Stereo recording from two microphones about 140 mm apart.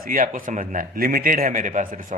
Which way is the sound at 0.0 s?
75° right (ahead or behind).